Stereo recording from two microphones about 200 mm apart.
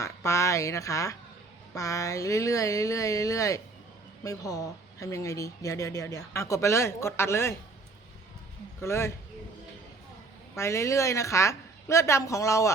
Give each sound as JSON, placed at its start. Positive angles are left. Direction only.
{"t": 0.0, "sound": "speech", "side_deg": 15}
{"t": 8.8, "sound": "speech", "side_deg": 15}
{"t": 10.6, "sound": "speech", "side_deg": 15}